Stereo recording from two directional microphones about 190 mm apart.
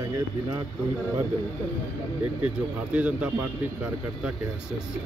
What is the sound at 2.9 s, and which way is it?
Speech, 5° right (ahead or behind).